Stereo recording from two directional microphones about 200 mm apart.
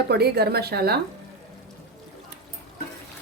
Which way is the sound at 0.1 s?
55° right (ahead or behind).